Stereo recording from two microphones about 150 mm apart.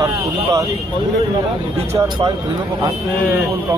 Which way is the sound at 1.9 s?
25° right (ahead or behind).